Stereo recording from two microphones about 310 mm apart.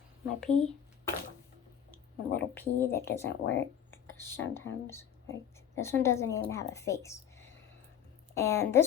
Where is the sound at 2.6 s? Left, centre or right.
Centre.